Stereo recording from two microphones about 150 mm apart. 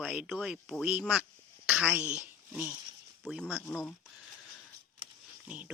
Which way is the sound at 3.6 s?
20° left (ahead or behind).